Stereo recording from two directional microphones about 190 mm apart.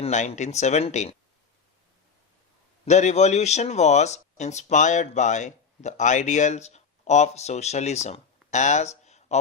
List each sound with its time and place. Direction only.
0.0 s a man's voice: 35° left (ahead or behind)
2.8 s a man's voice: 35° left (ahead or behind)